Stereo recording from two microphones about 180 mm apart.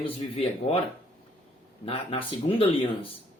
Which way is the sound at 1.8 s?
30° left (ahead or behind).